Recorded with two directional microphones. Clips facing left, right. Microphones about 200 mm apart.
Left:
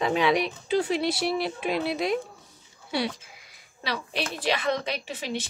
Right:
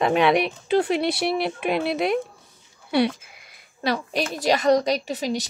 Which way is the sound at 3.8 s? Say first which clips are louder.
Right 7 dB; 45° right (ahead or behind).